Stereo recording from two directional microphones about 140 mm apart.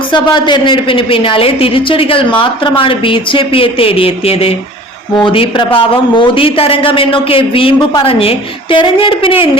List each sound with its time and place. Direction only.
0.1 s a woman's voice: 35° left (ahead or behind)